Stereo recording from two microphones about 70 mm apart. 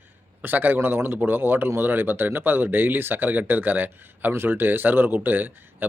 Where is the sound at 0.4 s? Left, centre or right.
Right.